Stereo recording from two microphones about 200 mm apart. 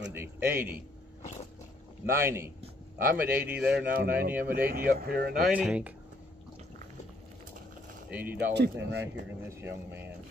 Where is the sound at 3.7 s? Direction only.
50° right (ahead or behind).